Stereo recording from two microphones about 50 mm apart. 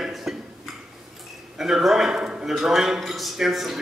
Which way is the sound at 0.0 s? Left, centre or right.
Centre.